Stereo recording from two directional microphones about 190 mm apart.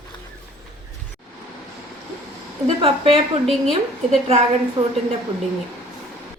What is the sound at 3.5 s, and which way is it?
Speech, centre (ahead or behind).